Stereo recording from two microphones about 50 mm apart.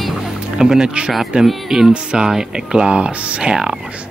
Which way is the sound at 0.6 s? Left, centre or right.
Centre.